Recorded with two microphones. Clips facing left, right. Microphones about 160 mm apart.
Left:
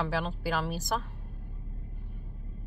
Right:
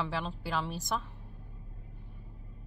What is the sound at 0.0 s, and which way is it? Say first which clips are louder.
Speech: left 4 dB; centre (ahead or behind).